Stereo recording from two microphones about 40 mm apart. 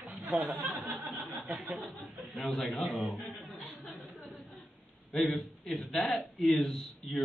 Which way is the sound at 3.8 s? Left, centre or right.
Centre.